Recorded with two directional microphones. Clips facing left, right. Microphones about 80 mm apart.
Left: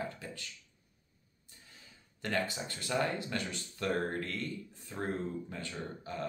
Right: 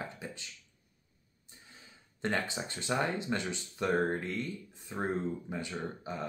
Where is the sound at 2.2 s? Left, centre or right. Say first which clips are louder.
Right 1 dB; right.